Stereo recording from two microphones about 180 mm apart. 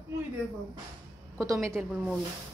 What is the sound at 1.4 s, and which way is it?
Speech, 15° right (ahead or behind).